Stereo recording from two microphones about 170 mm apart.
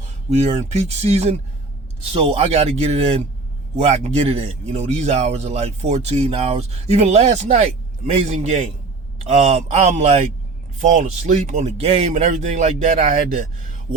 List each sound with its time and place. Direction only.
0.3 s speech: 40° right (ahead or behind)